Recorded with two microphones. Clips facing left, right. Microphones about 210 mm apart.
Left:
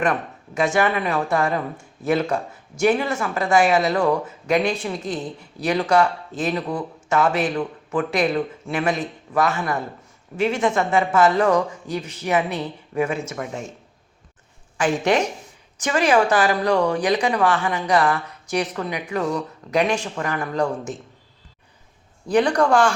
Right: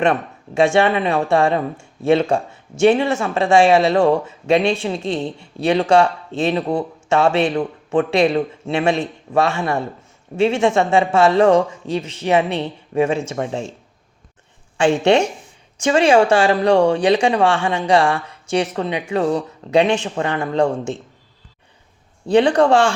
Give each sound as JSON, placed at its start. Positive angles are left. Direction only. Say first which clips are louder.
{"t": 0.0, "sound": "speech", "louder": "right 4 dB", "side_deg": -25}
{"t": 14.8, "sound": "speech", "louder": "right 5 dB", "side_deg": -30}
{"t": 22.3, "sound": "speech", "louder": "right 4 dB", "side_deg": -25}